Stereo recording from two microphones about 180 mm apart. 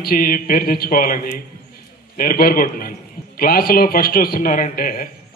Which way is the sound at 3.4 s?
55° left (ahead or behind).